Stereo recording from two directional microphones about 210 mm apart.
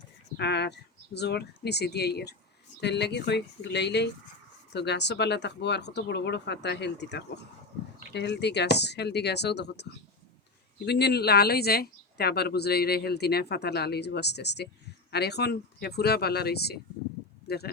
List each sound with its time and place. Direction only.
0.3 s speech: 55° left (ahead or behind)
10.8 s speech: 50° left (ahead or behind)